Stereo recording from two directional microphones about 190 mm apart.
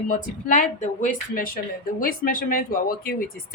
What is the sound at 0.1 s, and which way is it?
Speech, 45° left (ahead or behind).